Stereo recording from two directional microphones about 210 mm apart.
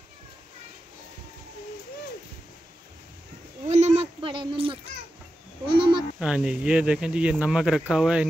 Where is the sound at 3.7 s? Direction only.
30° right (ahead or behind).